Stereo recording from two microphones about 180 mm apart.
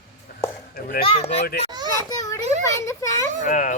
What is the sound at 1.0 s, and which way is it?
Speech, 35° left (ahead or behind).